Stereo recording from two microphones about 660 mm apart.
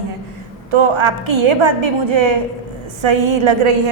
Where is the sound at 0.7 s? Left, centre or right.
Right.